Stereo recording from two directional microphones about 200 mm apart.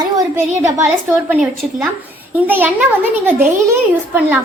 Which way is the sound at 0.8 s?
5° right (ahead or behind).